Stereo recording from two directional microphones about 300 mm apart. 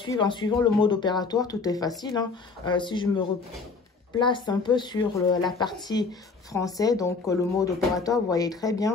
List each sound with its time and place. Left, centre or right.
0.0 s speech: centre